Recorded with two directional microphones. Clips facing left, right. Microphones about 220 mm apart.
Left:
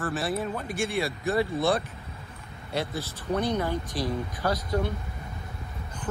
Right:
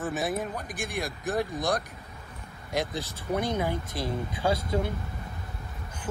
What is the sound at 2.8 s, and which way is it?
Speech, 15° right (ahead or behind).